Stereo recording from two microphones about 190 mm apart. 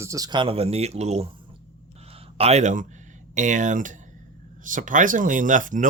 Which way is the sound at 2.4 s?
35° right (ahead or behind).